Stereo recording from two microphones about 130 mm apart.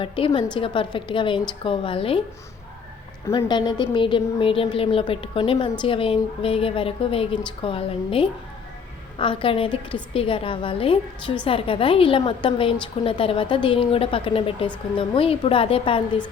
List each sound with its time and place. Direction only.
0.3 s a woman's voice: 35° left (ahead or behind)
3.3 s a woman's voice: 35° left (ahead or behind)